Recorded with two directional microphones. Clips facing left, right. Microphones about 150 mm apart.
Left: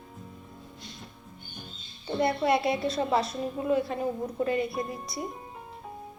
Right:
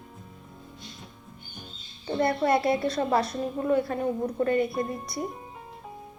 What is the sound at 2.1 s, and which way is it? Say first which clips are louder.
A woman's voice: right 1 dB; 25° left (ahead or behind).